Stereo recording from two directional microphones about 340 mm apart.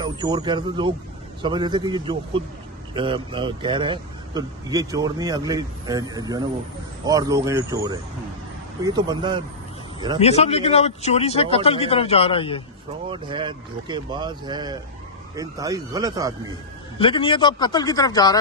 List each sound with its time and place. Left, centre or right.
0.0 s speech: centre
10.1 s speech: centre
13.1 s speech: centre
17.0 s speech: centre